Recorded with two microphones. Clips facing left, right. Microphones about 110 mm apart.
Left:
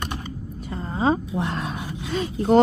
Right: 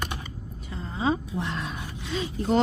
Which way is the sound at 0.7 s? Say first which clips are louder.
Left 5 dB; 50° left (ahead or behind).